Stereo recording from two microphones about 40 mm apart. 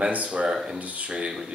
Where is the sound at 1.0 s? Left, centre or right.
Right.